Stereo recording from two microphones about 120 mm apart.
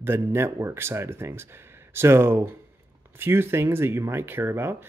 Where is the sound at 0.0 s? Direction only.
20° right (ahead or behind).